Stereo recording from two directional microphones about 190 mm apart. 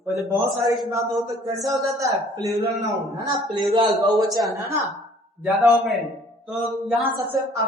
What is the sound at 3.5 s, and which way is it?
Speech, 25° right (ahead or behind).